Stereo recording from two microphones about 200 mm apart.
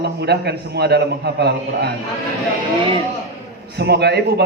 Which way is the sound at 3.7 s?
55° right (ahead or behind).